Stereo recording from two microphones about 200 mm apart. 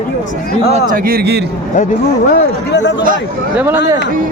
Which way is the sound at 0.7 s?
40° right (ahead or behind).